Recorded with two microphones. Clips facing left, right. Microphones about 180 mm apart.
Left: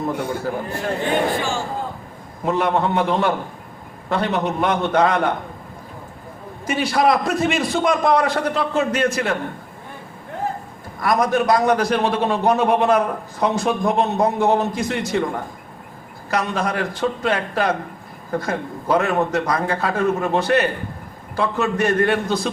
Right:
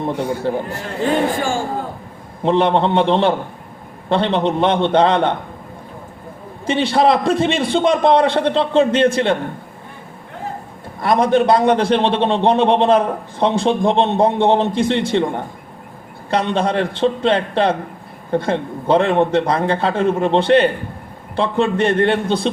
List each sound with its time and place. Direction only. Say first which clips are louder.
1.0 s speech: right 5 dB; 45° right (ahead or behind)
2.4 s a man's voice: right 4 dB; 30° right (ahead or behind)
6.7 s a man's voice: right 3 dB; 30° right (ahead or behind)
11.0 s a man's voice: right 4 dB; 30° right (ahead or behind)